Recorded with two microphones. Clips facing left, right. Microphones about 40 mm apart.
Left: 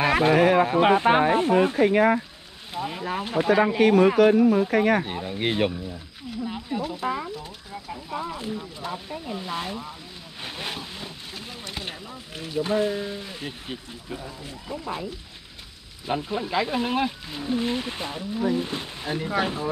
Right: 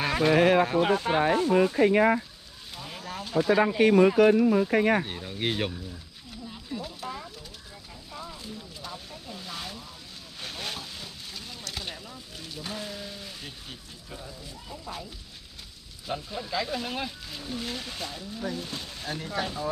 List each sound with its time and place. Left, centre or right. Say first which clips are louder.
0.0 s a sound: left 4 dB; left
0.4 s a sound: even; left
0.7 s speech: left 6 dB; left
1.9 s speech: left 2 dB; left
3.7 s speech: left 1 dB; left
4.5 s speech: left 3 dB; centre
4.7 s speech: left 2 dB; left
5.0 s speech: left 4 dB; centre
6.4 s speech: left 8 dB; left
16.1 s speech: left 6 dB; left